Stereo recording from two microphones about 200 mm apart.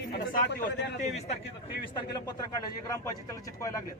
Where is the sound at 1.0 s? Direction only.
30° left (ahead or behind).